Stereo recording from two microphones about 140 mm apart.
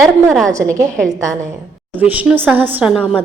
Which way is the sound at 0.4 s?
25° right (ahead or behind).